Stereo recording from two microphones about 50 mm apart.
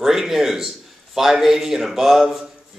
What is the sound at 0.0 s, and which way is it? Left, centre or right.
A man's voice, centre.